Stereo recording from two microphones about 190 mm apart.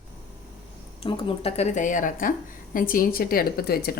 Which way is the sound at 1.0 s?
30° left (ahead or behind).